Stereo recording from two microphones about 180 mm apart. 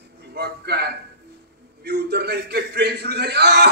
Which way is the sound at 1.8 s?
65° right (ahead or behind).